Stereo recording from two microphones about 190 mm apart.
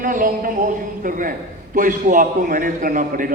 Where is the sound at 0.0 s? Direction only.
45° right (ahead or behind).